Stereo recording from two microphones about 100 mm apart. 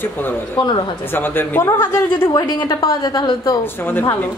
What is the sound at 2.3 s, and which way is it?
A woman's voice, 40° left (ahead or behind).